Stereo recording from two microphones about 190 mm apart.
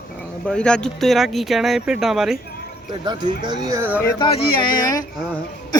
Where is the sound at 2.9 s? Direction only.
25° right (ahead or behind).